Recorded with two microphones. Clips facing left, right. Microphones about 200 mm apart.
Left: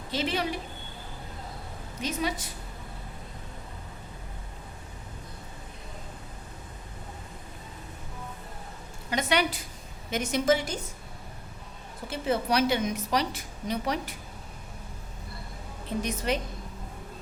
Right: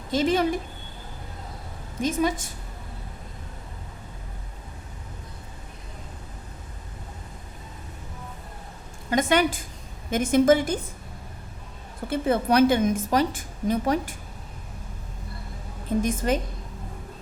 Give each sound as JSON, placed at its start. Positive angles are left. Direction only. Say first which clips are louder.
{"t": 0.1, "sound": "a woman's voice", "louder": "right 7 dB", "side_deg": -45}
{"t": 2.0, "sound": "a woman's voice", "louder": "right 7 dB", "side_deg": -50}
{"t": 9.0, "sound": "a woman's voice", "louder": "right 5 dB", "side_deg": -50}
{"t": 12.0, "sound": "a woman's voice", "louder": "right 5 dB", "side_deg": -55}
{"t": 16.0, "sound": "a woman's voice", "louder": "right 5 dB", "side_deg": -50}